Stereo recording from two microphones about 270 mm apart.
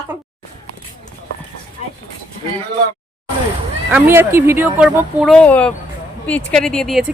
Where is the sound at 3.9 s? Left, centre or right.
Centre.